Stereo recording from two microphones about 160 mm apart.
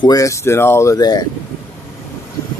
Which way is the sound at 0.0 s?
20° left (ahead or behind).